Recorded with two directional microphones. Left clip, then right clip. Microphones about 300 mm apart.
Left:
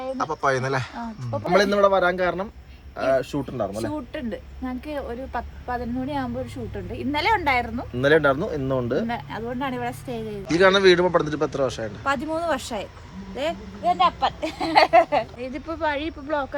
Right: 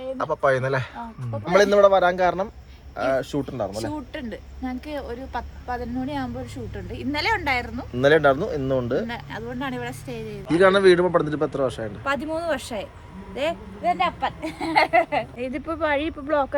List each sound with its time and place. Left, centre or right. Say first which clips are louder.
0.2 s a man's voice: right 2 dB; centre
15.4 s speech: right 2 dB; right